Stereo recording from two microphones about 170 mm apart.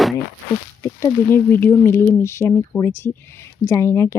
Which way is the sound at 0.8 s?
15° left (ahead or behind).